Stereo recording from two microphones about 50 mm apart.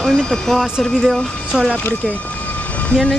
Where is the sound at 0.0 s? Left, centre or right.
Centre.